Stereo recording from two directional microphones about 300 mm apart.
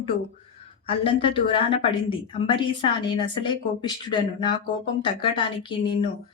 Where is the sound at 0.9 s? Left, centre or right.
Centre.